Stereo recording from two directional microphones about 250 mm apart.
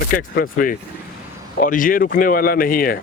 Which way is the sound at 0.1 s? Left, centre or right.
Left.